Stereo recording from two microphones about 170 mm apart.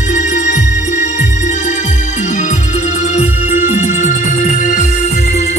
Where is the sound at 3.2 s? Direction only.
45° left (ahead or behind).